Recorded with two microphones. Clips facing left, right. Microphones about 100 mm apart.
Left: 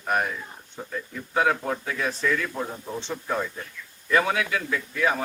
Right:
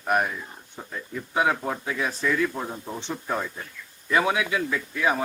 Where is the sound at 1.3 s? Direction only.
15° right (ahead or behind).